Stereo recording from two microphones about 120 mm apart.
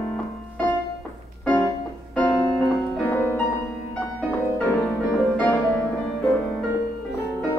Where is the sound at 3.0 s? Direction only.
15° left (ahead or behind).